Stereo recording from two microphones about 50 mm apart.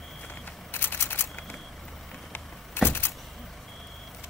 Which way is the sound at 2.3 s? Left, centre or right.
Left.